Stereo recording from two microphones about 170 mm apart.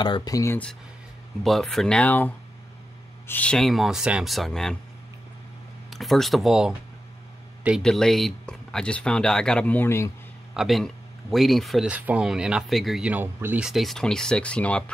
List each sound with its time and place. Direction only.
0.0 s speech: 25° left (ahead or behind)
1.4 s speech: centre (ahead or behind)
5.9 s speech: centre (ahead or behind)
10.5 s speech: centre (ahead or behind)